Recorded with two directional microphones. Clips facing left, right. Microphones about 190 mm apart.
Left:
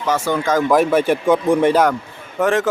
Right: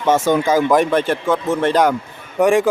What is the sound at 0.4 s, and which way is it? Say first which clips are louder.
Speech: right 1 dB; 10° right (ahead or behind).